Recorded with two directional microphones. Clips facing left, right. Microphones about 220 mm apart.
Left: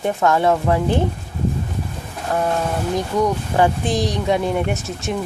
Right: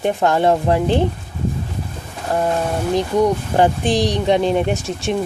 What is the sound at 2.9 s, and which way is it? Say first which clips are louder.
Speech: right 4 dB; 30° right (ahead or behind).